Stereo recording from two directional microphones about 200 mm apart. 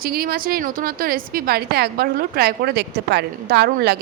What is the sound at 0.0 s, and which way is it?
A woman's voice, 50° right (ahead or behind).